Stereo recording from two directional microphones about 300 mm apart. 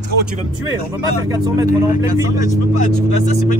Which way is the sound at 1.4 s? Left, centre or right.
Centre.